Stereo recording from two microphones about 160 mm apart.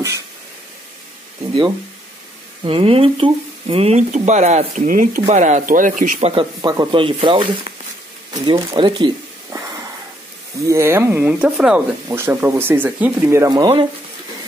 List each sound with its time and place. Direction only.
2.6 s speech: 35° right (ahead or behind); by 6.3 s 50° right (ahead or behind)
6.3 s speech: 25° right (ahead or behind)
9.5 s wheeze: 20° right (ahead or behind)
10.6 s speech: 20° right (ahead or behind)
12.1 s speech: 15° right (ahead or behind)